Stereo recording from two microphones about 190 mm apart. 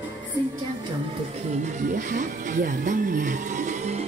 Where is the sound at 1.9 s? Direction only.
45° right (ahead or behind).